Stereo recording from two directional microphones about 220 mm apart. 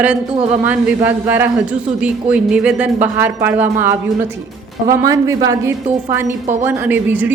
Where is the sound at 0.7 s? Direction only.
10° right (ahead or behind).